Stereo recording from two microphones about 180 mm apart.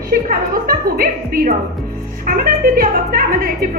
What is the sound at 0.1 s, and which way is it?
A woman's voice, 55° right (ahead or behind).